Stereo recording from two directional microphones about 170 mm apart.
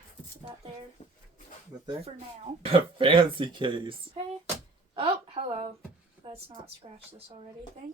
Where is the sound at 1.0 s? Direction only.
40° left (ahead or behind).